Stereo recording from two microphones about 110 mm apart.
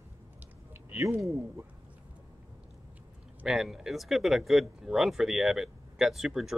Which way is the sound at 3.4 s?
5° right (ahead or behind).